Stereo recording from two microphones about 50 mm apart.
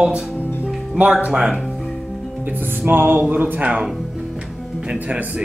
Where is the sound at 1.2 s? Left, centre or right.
Centre.